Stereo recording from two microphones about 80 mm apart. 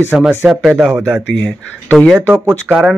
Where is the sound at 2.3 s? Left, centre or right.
Centre.